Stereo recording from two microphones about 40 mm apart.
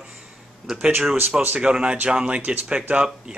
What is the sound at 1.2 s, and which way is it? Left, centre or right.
Speech, right.